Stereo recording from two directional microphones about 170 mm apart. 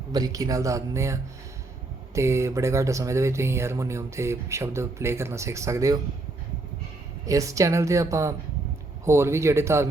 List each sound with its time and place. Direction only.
0.1 s speech: 20° right (ahead or behind)
7.3 s speech: 20° right (ahead or behind)